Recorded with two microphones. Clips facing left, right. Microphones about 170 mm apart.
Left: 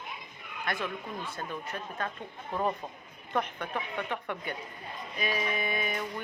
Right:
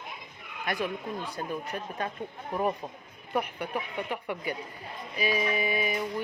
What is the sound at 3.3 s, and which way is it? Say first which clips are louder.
Speech: right 2 dB; 10° right (ahead or behind).